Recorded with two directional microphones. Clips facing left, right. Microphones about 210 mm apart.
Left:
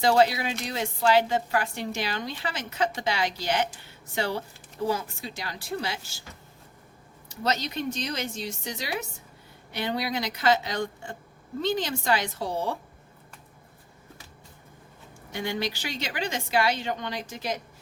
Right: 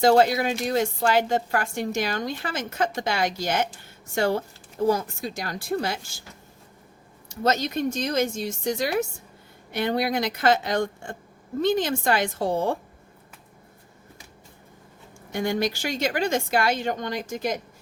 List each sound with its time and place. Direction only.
0.0 s a woman's voice: 45° right (ahead or behind)
7.4 s a woman's voice: 45° right (ahead or behind)
15.3 s a woman's voice: 50° right (ahead or behind)